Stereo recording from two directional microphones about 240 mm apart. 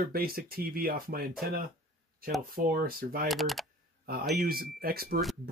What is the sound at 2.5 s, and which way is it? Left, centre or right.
Speech, right.